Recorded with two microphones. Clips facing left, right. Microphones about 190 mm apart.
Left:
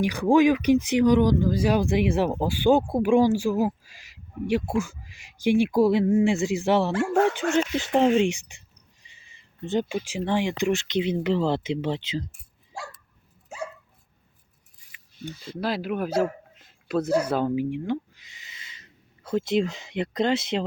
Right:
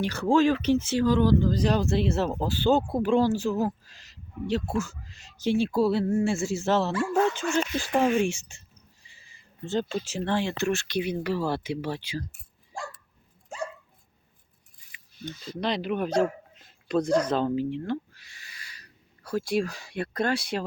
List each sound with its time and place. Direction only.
0.0 s speech: 15° left (ahead or behind)
6.9 s speech: 65° left (ahead or behind)
7.5 s speech: 20° left (ahead or behind)
12.3 s a sound: centre (ahead or behind)
15.5 s speech: 5° left (ahead or behind); by 20.7 s 20° left (ahead or behind)